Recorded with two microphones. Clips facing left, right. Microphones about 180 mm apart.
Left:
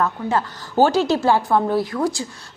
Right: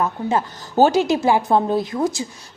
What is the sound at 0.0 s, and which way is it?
A woman's voice, 20° right (ahead or behind).